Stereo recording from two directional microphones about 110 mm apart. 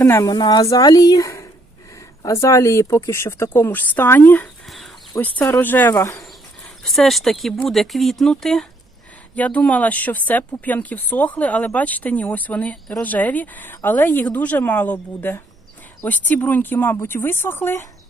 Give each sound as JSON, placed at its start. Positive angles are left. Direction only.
{"t": 0.0, "sound": "speech", "side_deg": 25}
{"t": 0.3, "sound": "speech", "side_deg": 40}
{"t": 4.6, "sound": "a sound", "side_deg": 0}
{"t": 5.2, "sound": "speech", "side_deg": 15}
{"t": 6.8, "sound": "speech", "side_deg": 0}